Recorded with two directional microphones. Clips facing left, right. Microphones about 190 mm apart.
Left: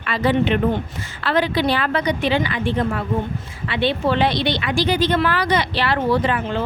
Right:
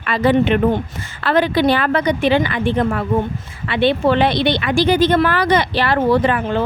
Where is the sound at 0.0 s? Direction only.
50° right (ahead or behind).